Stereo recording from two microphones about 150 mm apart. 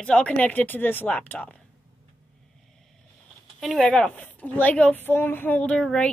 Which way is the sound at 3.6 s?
5° left (ahead or behind).